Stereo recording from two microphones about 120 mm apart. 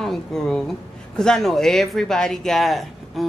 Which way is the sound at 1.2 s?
5° left (ahead or behind).